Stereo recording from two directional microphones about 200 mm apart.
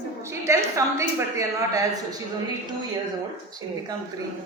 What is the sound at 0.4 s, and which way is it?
A woman's voice, 15° right (ahead or behind).